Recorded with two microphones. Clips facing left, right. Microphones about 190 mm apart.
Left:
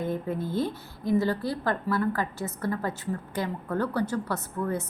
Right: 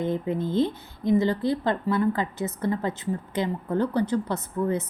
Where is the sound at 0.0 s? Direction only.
20° right (ahead or behind).